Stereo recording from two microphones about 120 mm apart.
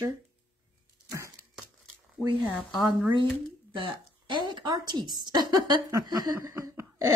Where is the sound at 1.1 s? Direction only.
25° right (ahead or behind).